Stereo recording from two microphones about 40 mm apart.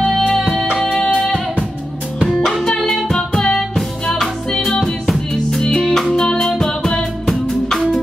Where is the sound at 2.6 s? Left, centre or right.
Centre.